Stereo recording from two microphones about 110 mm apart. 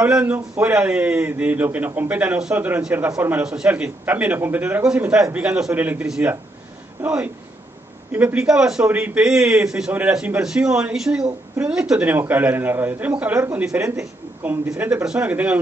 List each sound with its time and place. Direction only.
0.0 s a man's voice: 10° right (ahead or behind)